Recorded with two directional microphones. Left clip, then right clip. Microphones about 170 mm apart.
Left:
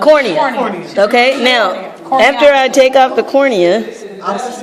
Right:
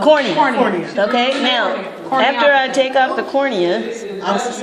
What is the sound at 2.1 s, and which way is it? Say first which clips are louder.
A woman's voice: left 5 dB; 70° left (ahead or behind).